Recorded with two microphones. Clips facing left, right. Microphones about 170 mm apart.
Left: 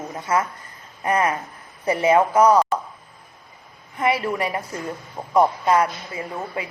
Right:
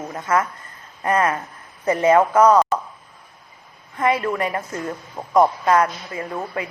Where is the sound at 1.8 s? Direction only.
10° left (ahead or behind).